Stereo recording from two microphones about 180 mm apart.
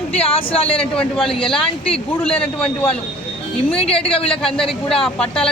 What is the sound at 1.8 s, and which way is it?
Speech, 30° left (ahead or behind).